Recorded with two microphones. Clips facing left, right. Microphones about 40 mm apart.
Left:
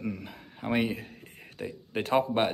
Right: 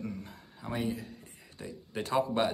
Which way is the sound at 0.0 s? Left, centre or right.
Left.